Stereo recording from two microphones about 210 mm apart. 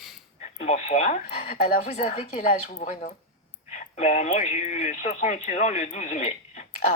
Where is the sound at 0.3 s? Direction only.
30° left (ahead or behind).